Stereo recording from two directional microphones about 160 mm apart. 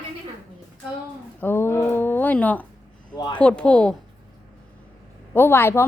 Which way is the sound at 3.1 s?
25° left (ahead or behind).